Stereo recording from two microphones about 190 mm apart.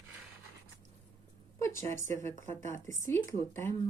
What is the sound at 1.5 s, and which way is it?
Speech, 15° left (ahead or behind).